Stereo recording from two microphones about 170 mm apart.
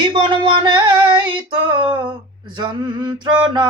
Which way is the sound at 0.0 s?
25° right (ahead or behind).